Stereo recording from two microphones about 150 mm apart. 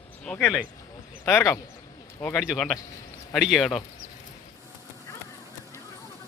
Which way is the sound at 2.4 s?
Centre (ahead or behind).